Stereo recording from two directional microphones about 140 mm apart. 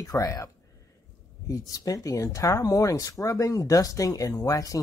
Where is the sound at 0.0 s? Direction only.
25° left (ahead or behind).